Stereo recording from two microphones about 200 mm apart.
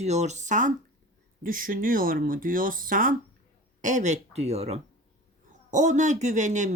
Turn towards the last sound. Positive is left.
turn(degrees=-35)  # may be behind; listen again after turning